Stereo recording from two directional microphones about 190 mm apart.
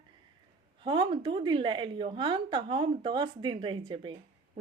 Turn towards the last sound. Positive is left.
turn(degrees=-25)  # may be behind; listen again after turning